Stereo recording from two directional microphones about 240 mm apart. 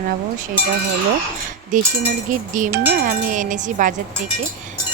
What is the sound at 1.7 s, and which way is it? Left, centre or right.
Speech, right.